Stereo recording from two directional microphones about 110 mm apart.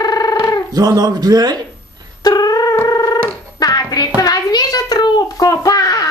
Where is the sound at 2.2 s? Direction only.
35° left (ahead or behind).